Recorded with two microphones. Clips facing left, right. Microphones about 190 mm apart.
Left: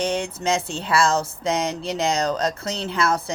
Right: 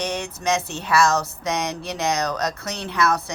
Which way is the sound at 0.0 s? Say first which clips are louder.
Left 2 dB; 30° left (ahead or behind).